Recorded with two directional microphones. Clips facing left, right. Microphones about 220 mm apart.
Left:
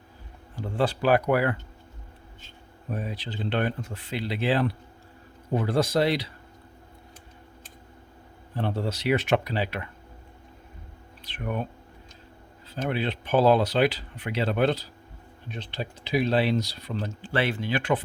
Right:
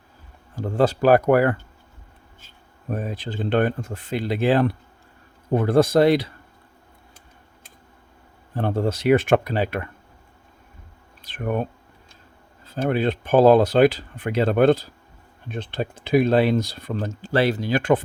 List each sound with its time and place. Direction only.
0.5 s speech: 45° right (ahead or behind)
2.9 s speech: 45° right (ahead or behind)
8.5 s speech: 45° right (ahead or behind)
11.2 s speech: 45° right (ahead or behind)